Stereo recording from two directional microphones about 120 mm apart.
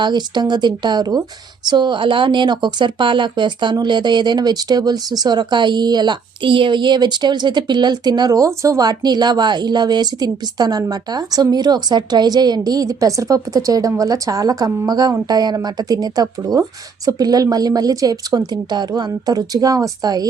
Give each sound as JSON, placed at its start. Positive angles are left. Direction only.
{"t": 0.0, "sound": "speech", "side_deg": -40}